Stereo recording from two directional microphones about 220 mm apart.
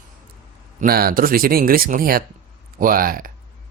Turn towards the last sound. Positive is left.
turn(degrees=-40)  # may be behind; listen again after turning